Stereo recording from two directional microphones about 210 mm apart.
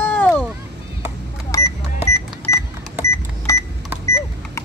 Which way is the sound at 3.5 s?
15° left (ahead or behind).